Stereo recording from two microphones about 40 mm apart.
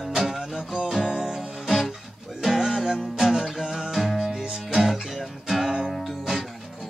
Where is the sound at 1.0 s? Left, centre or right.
Centre.